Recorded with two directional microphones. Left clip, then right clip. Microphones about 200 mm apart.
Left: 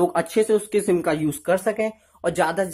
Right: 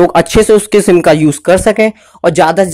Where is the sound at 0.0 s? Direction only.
40° right (ahead or behind).